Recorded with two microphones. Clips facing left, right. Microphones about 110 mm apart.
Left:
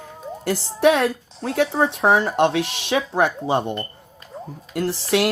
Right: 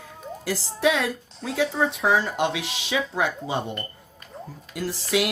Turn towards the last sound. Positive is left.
turn(degrees=70)  # may be behind; listen again after turning